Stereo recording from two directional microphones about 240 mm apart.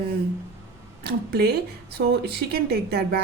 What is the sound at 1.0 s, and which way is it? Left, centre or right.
A woman's voice, right.